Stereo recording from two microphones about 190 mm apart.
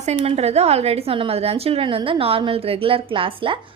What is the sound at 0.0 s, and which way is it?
A woman's voice, 35° right (ahead or behind).